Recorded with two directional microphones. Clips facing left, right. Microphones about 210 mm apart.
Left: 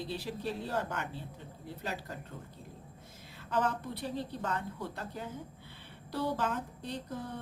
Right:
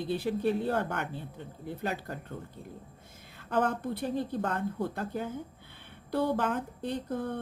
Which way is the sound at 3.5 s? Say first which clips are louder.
Right 4 dB; 55° right (ahead or behind).